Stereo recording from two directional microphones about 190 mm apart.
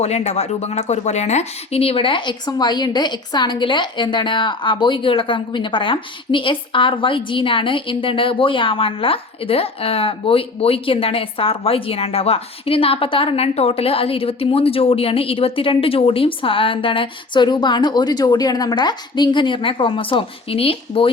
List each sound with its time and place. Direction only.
0.0 s speech: 35° left (ahead or behind)